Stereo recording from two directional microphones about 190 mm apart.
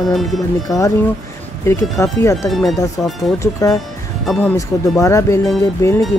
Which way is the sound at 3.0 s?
5° left (ahead or behind).